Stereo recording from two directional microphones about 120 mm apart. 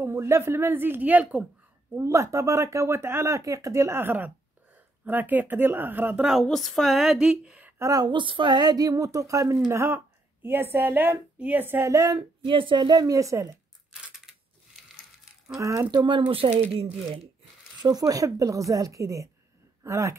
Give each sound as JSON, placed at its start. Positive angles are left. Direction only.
{"t": 0.0, "sound": "a woman's voice", "side_deg": -20}
{"t": 2.0, "sound": "a woman's voice", "side_deg": -25}
{"t": 6.4, "sound": "speech", "side_deg": 0}
{"t": 7.8, "sound": "a woman's voice", "side_deg": -30}
{"t": 12.2, "sound": "a woman's voice", "side_deg": -45}
{"t": 15.6, "sound": "a woman's voice", "side_deg": -30}
{"t": 17.8, "sound": "a woman's voice", "side_deg": -30}